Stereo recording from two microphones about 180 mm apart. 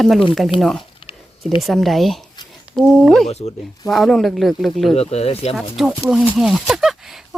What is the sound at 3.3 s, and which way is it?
Speech, 35° left (ahead or behind).